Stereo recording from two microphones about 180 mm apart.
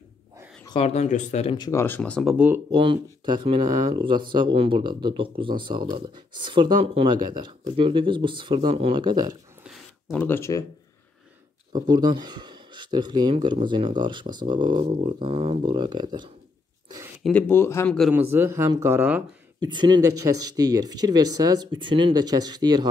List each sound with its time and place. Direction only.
0.7 s speech: 35° left (ahead or behind)
1.6 s speech: 15° left (ahead or behind)
2.3 s speech: 10° right (ahead or behind)
2.7 s speech: 25° right (ahead or behind)
9.6 s a sound: centre (ahead or behind)
10.2 s speech: 15° left (ahead or behind)
11.9 s speech: 25° right (ahead or behind)
17.2 s speech: 5° left (ahead or behind)
18.1 s speech: 10° right (ahead or behind)
19.6 s speech: 25° right (ahead or behind)